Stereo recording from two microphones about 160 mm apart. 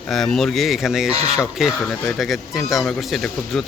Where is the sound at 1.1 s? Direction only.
40° right (ahead or behind).